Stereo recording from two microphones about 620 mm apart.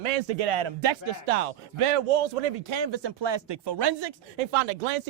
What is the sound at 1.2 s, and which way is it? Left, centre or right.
Speech, right.